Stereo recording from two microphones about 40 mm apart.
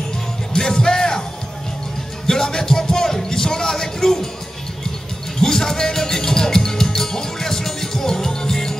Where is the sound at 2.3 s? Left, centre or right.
Centre.